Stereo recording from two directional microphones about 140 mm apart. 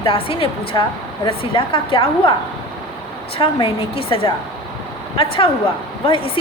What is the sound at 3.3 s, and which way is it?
Speech, 40° left (ahead or behind).